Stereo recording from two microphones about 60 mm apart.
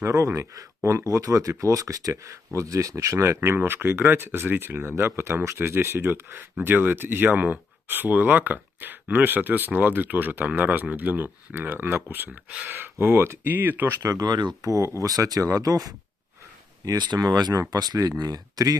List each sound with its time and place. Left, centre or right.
0.8 s speech: right
14.0 s speech: right